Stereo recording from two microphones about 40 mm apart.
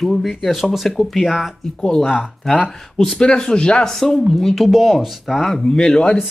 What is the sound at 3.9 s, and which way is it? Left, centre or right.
Speech, centre.